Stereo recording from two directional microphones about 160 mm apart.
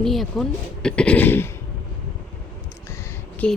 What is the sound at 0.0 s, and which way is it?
A woman's voice, centre (ahead or behind).